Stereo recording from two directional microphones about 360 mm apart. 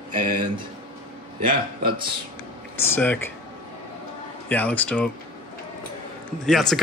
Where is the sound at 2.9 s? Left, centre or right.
Centre.